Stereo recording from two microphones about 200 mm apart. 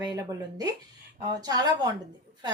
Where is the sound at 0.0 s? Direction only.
20° right (ahead or behind).